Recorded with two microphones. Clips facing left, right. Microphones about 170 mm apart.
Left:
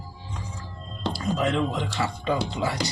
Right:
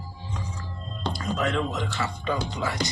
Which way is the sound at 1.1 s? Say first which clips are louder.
Left 2 dB; 30° left (ahead or behind).